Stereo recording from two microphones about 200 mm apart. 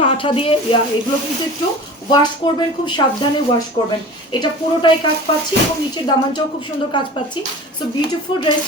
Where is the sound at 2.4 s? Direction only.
25° left (ahead or behind).